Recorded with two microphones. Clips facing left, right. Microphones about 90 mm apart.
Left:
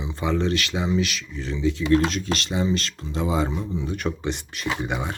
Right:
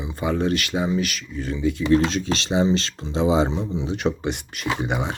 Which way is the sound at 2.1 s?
30° right (ahead or behind).